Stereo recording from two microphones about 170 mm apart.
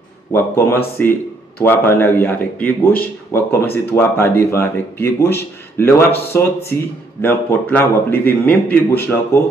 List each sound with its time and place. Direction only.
0.3 s speech: 15° left (ahead or behind)